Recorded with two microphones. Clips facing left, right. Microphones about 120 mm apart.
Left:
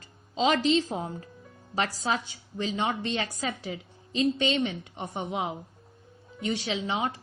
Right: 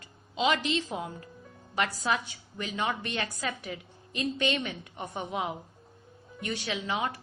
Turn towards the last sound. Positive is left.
turn(degrees=25)  # may be behind; listen again after turning